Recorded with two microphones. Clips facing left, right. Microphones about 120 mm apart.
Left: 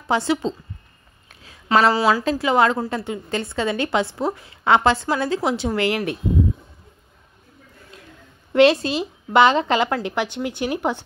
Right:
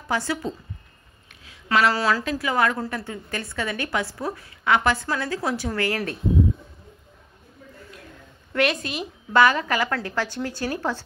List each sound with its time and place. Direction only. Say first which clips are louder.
0.1 s a woman's voice: left 5 dB; 25° left (ahead or behind)
1.9 s a woman's voice: left 4 dB; 15° left (ahead or behind)
8.5 s a woman's voice: left 9 dB; 30° left (ahead or behind)